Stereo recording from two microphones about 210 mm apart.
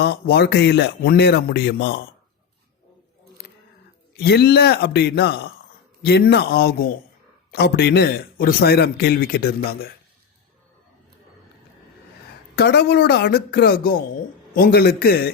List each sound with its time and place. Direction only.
0.0 s a man's voice: 50° left (ahead or behind)
4.2 s a man's voice: 50° left (ahead or behind)
12.5 s a man's voice: 50° left (ahead or behind)